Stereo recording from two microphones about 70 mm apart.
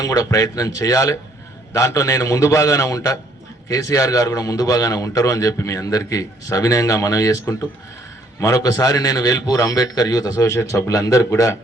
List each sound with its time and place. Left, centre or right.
0.0 s a man's voice: left
8.4 s a man's voice: left